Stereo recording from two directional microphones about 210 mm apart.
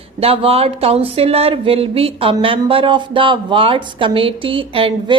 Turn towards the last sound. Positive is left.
turn(degrees=-25)  # may be behind; listen again after turning